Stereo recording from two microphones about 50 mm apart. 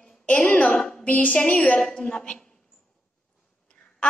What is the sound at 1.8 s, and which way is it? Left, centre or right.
Speech, centre.